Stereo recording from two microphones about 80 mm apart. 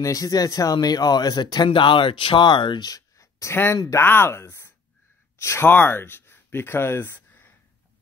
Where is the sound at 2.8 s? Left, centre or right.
Left.